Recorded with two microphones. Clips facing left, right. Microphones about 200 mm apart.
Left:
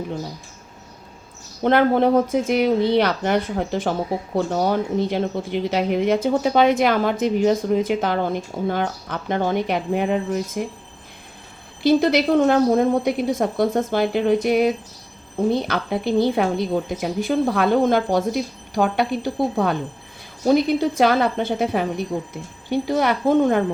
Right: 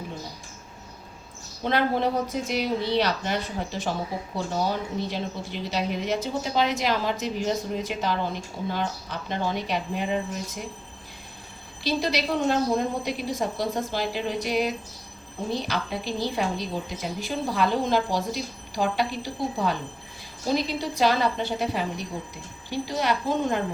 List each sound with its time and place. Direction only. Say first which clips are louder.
1.6 s speech: left 8 dB; 55° left (ahead or behind)
11.8 s speech: left 10 dB; 55° left (ahead or behind)